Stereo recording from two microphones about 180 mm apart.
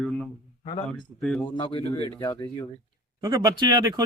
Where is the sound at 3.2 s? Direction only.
20° right (ahead or behind).